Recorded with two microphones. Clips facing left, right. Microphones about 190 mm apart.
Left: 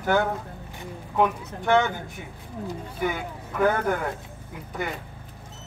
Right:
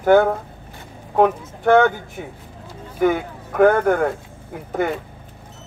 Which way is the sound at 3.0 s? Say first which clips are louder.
Right 10 dB; 55° right (ahead or behind).